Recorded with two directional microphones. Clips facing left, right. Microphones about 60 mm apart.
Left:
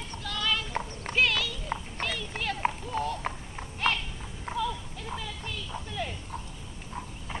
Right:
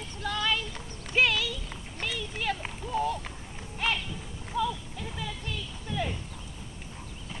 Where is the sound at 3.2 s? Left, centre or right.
Left.